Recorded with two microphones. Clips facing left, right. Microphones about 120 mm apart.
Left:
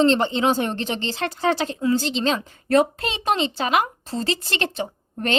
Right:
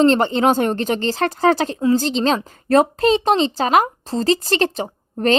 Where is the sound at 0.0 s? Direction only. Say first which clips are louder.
Right 4 dB; 45° right (ahead or behind).